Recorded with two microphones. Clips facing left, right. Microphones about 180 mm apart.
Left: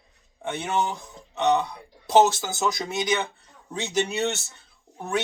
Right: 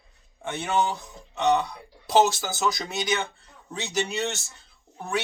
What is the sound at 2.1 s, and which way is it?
Speech, 25° left (ahead or behind).